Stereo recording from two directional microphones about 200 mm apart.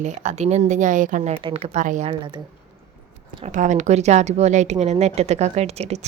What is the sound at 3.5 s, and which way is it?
Speech, 40° right (ahead or behind).